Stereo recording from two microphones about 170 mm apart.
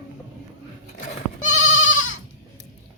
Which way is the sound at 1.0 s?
45° left (ahead or behind).